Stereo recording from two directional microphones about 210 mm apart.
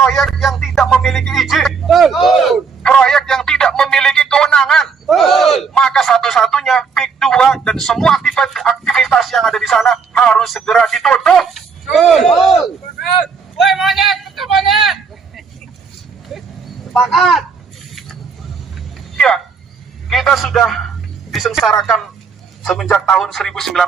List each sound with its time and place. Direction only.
0.0 s music: centre (ahead or behind)
16.3 s dog: centre (ahead or behind)
16.9 s a sound: centre (ahead or behind)
19.1 s a sound: 5° left (ahead or behind)
21.3 s telephone: centre (ahead or behind)
22.6 s music: centre (ahead or behind)